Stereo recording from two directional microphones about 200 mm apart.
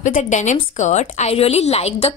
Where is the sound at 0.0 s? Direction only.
40° left (ahead or behind).